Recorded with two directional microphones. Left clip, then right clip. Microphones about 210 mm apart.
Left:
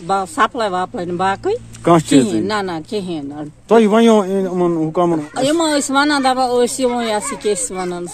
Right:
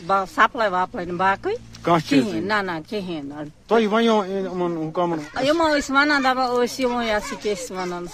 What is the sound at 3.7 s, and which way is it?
A man's voice, 50° left (ahead or behind).